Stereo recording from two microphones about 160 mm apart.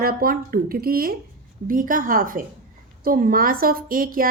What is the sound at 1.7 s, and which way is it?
A woman's voice, 55° right (ahead or behind).